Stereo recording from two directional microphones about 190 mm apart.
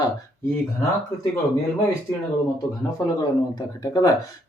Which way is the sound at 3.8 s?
20° left (ahead or behind).